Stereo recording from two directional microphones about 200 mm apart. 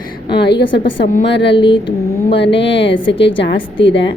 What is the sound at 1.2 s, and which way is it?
Speech, 60° left (ahead or behind).